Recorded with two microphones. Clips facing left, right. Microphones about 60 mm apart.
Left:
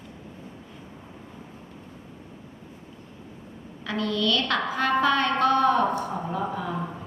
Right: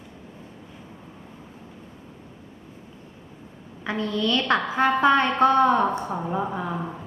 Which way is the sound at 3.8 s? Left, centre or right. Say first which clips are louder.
Right 1 dB; right.